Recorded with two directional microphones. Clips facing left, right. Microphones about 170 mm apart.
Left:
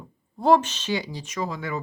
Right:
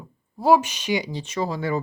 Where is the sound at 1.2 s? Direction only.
30° right (ahead or behind).